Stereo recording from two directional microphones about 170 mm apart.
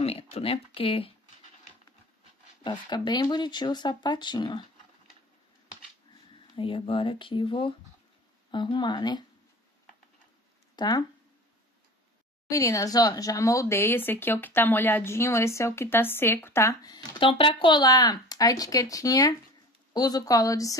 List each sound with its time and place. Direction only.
0.0 s speech: 35° left (ahead or behind)
2.6 s speech: 25° left (ahead or behind)
6.5 s speech: 30° left (ahead or behind)
10.8 s speech: 25° left (ahead or behind)
12.4 s speech: 20° left (ahead or behind)